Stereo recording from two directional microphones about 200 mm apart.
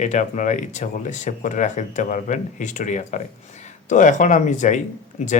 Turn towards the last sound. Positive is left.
turn(degrees=35)  # may be behind; listen again after turning